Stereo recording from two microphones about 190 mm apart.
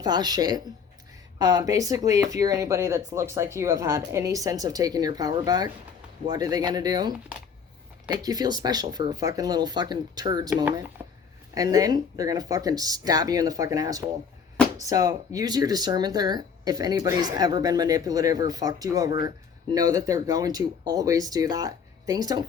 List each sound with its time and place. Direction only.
0.0 s speech: 20° right (ahead or behind)
8.1 s speech: 20° right (ahead or behind)
10.7 s speech: 10° right (ahead or behind)